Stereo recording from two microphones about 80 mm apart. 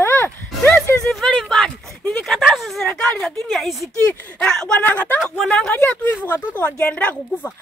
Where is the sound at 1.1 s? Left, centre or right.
Centre.